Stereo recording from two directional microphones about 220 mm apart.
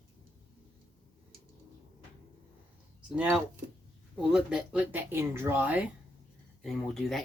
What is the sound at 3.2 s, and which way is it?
Speech, 5° right (ahead or behind).